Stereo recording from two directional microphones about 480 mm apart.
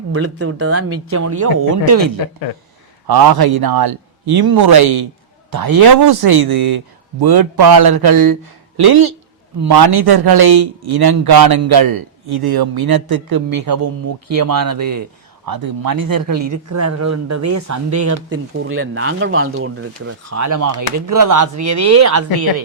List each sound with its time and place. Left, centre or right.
0.1 s speech: right
1.4 s a man's voice: right
9.6 s a man's voice: right